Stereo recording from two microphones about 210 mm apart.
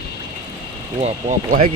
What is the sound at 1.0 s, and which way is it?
Speech, 30° right (ahead or behind).